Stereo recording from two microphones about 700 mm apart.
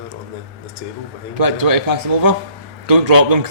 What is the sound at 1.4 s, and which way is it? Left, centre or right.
A man's voice, right.